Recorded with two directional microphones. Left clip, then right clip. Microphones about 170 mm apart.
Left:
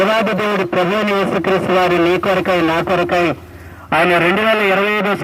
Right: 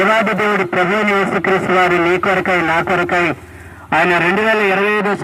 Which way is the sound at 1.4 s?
40° left (ahead or behind).